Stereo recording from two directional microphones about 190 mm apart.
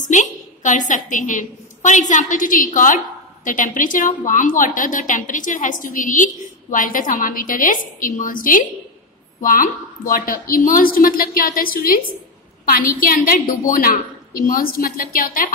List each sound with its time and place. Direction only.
0.0 s a woman's voice: 40° left (ahead or behind)